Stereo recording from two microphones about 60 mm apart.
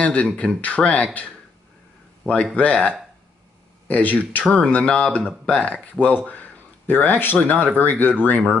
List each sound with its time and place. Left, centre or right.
0.0 s speech: left
2.5 s speech: left